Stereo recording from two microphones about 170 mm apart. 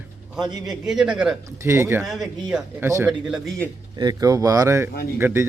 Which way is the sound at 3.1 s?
Centre (ahead or behind).